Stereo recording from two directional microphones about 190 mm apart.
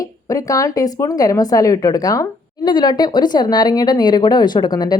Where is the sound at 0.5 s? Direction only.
20° left (ahead or behind).